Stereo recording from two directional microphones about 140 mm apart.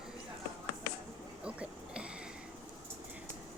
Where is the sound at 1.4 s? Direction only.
5° right (ahead or behind).